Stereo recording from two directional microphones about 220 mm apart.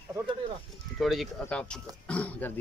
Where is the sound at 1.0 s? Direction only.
Centre (ahead or behind).